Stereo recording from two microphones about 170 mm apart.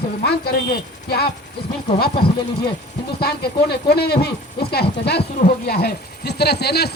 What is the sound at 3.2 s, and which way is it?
Speech, 70° left (ahead or behind).